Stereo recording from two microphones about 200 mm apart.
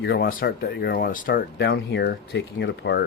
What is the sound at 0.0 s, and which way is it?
Speech, 50° left (ahead or behind).